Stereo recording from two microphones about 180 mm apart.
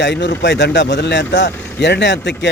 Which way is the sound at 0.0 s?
80° left.